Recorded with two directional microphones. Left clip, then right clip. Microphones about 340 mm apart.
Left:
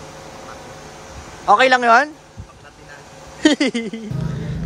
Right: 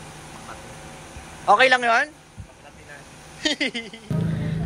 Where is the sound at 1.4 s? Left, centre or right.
Centre.